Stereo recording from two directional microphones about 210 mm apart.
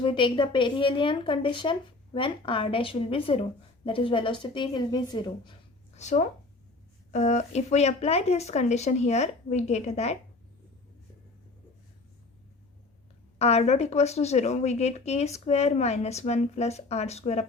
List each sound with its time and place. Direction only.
0.0 s a woman's voice: 25° left (ahead or behind)
13.4 s speech: 30° left (ahead or behind)